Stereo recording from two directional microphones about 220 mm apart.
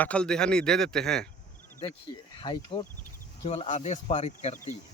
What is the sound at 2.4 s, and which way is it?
Speech, 20° left (ahead or behind).